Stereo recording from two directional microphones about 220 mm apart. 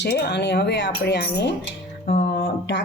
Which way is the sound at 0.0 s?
50° left (ahead or behind).